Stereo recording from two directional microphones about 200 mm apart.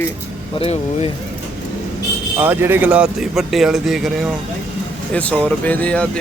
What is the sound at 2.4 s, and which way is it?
A man's voice, 10° right (ahead or behind).